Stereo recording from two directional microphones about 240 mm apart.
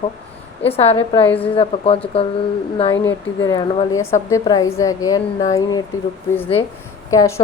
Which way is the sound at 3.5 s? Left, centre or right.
Centre.